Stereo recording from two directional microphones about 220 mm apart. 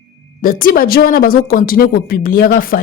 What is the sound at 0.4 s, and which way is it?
A woman's voice, 40° left (ahead or behind).